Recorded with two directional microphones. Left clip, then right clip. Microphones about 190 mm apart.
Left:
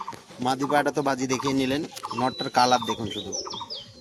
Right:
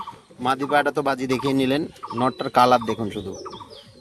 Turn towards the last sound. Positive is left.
turn(degrees=-55)  # may be behind; listen again after turning